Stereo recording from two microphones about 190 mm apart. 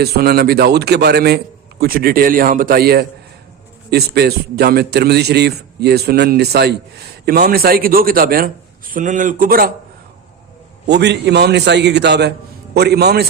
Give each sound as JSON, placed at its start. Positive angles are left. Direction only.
{"t": 0.0, "sound": "a man's voice", "side_deg": -55}
{"t": 10.8, "sound": "a man's voice", "side_deg": -65}